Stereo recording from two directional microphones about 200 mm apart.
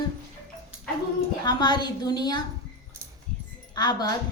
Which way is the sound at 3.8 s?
20° left (ahead or behind).